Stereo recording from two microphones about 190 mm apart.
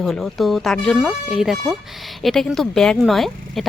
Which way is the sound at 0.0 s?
Centre (ahead or behind).